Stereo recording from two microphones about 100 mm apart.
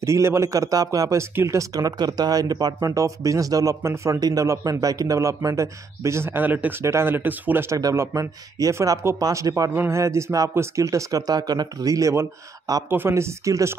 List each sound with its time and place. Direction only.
0.0 s speech: 30° right (ahead or behind)
7.7 s speech: 30° right (ahead or behind)
12.9 s speech: 25° right (ahead or behind)